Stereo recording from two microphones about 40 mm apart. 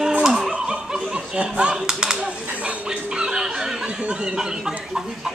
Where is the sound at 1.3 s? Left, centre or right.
Right.